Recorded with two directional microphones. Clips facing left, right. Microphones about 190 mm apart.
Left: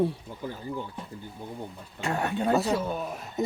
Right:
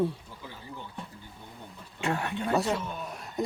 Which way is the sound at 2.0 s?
35° left (ahead or behind).